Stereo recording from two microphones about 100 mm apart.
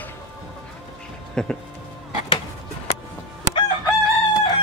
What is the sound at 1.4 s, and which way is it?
Speech, 10° left (ahead or behind).